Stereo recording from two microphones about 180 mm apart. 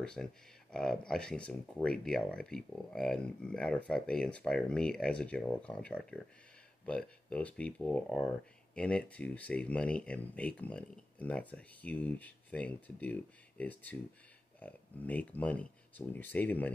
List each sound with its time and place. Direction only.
0.0 s speech: 5° left (ahead or behind)